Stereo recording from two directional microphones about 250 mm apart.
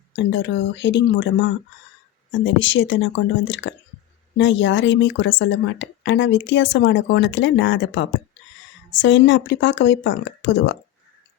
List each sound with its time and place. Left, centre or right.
0.1 s speech: left